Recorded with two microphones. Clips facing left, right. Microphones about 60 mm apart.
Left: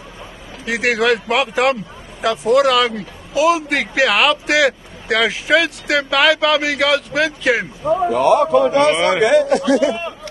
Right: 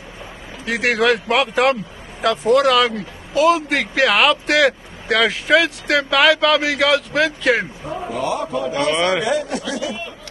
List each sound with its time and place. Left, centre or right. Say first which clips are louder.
0.7 s a man's voice: left 1 dB; centre
8.1 s speech: left 8 dB; left
8.9 s a man's voice: left 2 dB; centre
9.2 s speech: left 8 dB; left